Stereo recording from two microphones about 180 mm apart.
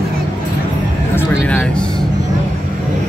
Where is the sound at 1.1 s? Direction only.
10° left (ahead or behind).